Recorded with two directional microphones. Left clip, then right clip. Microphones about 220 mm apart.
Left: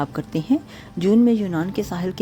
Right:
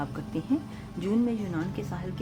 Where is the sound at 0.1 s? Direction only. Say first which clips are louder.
Left 8 dB; 40° left (ahead or behind).